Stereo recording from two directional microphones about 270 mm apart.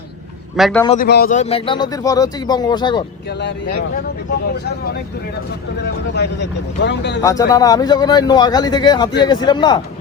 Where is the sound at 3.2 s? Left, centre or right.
Left.